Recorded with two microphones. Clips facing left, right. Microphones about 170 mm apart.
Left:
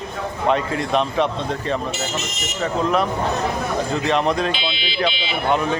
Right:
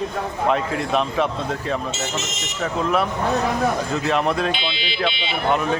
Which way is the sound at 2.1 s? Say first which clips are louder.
Even; 20° right (ahead or behind).